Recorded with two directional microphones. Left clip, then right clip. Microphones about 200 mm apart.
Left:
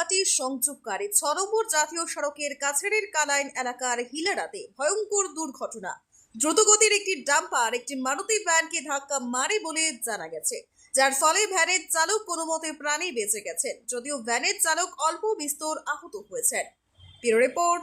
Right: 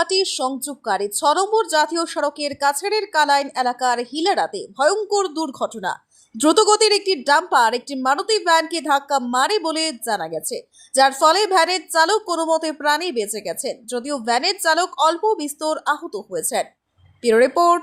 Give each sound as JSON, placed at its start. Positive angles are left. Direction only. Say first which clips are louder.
{"t": 0.0, "sound": "a woman's voice", "louder": "right 7 dB", "side_deg": -15}